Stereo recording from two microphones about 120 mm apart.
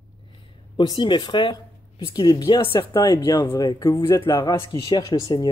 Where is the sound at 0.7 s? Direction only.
40° left (ahead or behind); by 4.2 s 25° left (ahead or behind).